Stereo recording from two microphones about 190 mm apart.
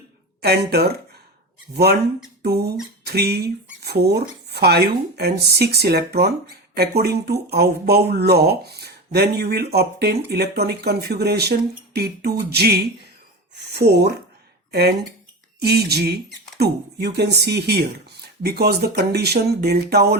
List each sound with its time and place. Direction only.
0.4 s speech: 55° right (ahead or behind)
2.4 s beatboxing: 55° right (ahead or behind)
3.0 s speech: 55° right (ahead or behind)